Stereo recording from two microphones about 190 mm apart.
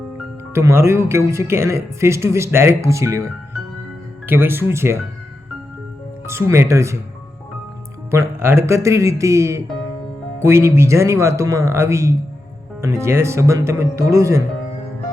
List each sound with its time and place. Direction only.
0.5 s speech: 15° right (ahead or behind)
4.3 s speech: 10° right (ahead or behind)
6.2 s speech: 15° right (ahead or behind)
8.1 s speech: 15° right (ahead or behind)